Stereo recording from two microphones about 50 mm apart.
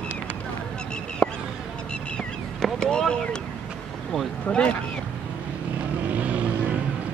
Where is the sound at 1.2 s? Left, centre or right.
Centre.